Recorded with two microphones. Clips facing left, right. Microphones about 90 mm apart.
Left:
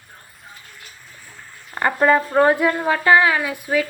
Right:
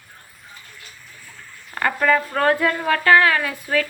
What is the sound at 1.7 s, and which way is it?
A woman's voice, 25° left (ahead or behind).